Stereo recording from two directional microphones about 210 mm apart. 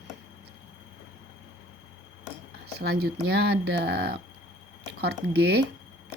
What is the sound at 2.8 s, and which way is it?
Speech, 50° right (ahead or behind).